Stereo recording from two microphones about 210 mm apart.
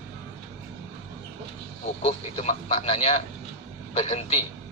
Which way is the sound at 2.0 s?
30° left (ahead or behind).